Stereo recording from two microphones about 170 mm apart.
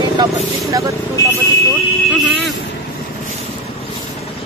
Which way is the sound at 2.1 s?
5° right (ahead or behind).